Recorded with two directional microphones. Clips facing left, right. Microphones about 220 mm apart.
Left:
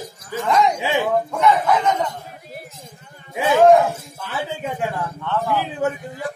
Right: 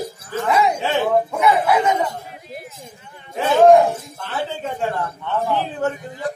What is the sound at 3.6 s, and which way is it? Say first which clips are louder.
A man's voice: right 2 dB; 5° left (ahead or behind).